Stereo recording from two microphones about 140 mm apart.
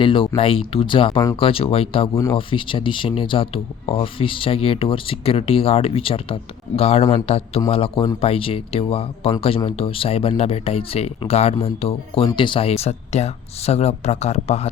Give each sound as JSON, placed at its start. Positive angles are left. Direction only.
{"t": 0.0, "sound": "speech", "side_deg": 40}